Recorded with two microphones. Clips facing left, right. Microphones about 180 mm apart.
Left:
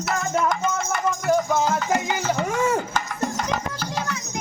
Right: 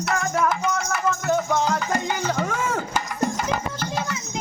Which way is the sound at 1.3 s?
5° left (ahead or behind).